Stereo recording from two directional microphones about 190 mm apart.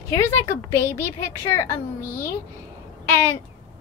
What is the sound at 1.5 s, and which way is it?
A woman's voice, 15° left (ahead or behind).